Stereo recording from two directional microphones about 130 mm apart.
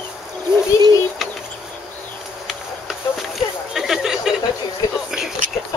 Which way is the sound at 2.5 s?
Centre (ahead or behind).